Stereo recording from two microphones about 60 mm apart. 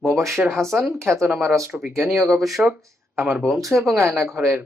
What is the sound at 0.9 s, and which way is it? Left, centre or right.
Speech, right.